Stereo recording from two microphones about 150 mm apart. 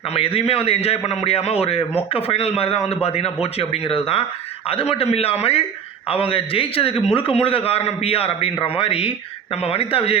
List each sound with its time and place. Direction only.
0.1 s a man's voice: 40° left (ahead or behind)